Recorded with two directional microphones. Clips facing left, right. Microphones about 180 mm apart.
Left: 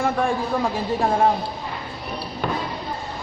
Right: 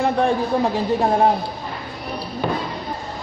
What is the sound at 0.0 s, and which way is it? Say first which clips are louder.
Speech: right 3 dB; 20° right (ahead or behind).